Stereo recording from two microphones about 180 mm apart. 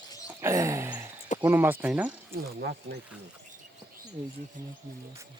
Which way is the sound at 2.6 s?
65° right (ahead or behind).